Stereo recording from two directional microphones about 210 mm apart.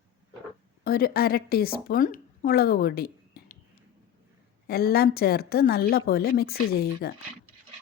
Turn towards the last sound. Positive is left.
turn(degrees=45)  # may be behind; listen again after turning